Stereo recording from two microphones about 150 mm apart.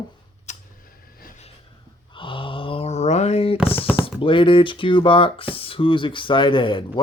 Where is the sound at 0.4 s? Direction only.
70° left (ahead or behind).